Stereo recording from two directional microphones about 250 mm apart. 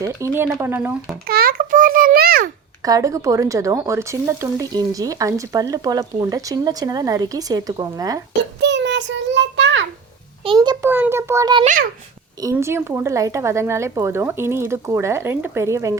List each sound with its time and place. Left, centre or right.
0.0 s speech: centre
1.3 s a child's voice: right
2.8 s speech: centre
8.6 s child singing: right
10.4 s speech: centre
11.6 s a child's voice: right
12.4 s speech: centre